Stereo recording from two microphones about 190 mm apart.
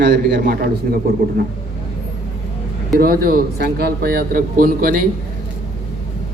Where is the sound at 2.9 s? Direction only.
50° right (ahead or behind).